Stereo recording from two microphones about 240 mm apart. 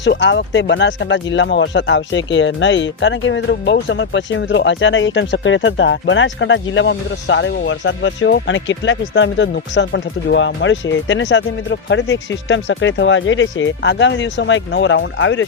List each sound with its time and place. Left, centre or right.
0.0 s speech: left